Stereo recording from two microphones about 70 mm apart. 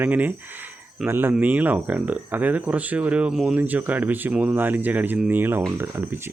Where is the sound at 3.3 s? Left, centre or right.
Centre.